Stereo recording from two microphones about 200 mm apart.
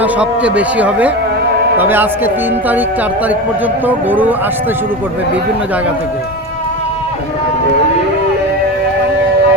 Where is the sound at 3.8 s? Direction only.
10° right (ahead or behind).